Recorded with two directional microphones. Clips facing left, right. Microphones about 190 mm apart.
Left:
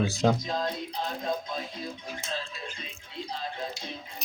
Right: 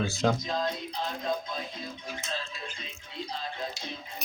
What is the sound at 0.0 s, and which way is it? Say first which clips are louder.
Speech: left 2 dB; 15° left (ahead or behind).